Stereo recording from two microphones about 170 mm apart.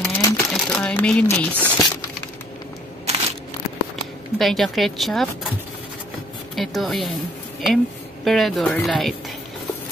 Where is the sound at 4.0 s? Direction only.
Centre (ahead or behind).